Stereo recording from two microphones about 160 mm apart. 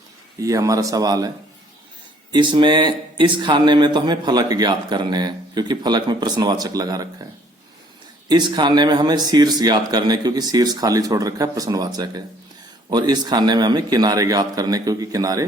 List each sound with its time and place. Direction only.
0.3 s speech: 20° right (ahead or behind)
2.3 s speech: 30° right (ahead or behind)
8.3 s speech: 25° right (ahead or behind)